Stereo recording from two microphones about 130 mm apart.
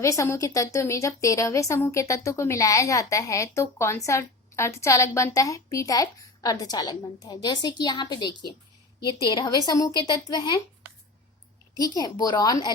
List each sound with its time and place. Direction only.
0.0 s a woman's voice: 25° left (ahead or behind)
11.8 s speech: 30° left (ahead or behind)